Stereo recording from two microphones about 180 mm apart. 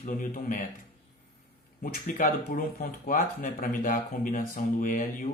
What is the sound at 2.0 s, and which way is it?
Speech, 50° left (ahead or behind).